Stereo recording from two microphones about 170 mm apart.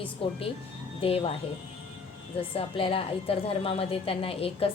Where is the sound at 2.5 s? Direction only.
35° left (ahead or behind).